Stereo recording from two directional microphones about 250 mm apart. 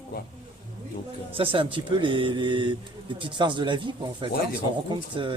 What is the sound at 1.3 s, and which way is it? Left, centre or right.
Speech, right.